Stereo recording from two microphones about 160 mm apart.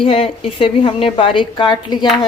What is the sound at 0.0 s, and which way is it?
A woman's voice, 35° left (ahead or behind).